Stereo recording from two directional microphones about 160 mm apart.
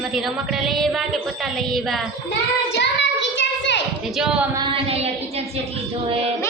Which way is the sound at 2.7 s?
90° left.